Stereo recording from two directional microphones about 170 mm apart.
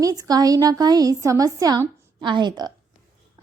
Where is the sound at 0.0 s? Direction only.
20° right (ahead or behind).